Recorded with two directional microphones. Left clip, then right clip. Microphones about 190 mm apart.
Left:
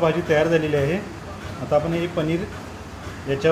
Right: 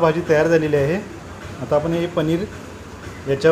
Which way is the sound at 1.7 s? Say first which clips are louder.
Right 2 dB; 35° right (ahead or behind).